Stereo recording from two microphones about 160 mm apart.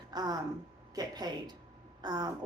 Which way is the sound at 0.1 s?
25° right (ahead or behind).